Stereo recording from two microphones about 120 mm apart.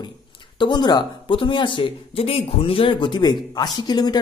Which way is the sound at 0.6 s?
40° left (ahead or behind).